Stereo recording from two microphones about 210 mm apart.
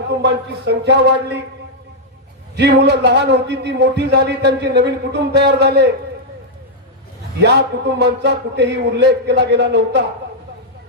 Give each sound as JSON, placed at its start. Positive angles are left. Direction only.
{"t": 0.2, "sound": "a man's voice", "side_deg": -55}
{"t": 2.6, "sound": "a man's voice", "side_deg": -55}
{"t": 7.4, "sound": "a man's voice", "side_deg": -55}